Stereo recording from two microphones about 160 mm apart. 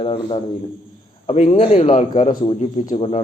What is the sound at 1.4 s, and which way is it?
A man's voice, 35° left (ahead or behind).